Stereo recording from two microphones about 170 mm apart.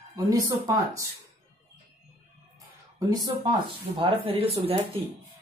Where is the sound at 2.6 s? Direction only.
20° right (ahead or behind).